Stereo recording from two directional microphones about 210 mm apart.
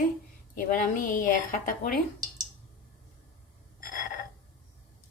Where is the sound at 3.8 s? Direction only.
40° left (ahead or behind).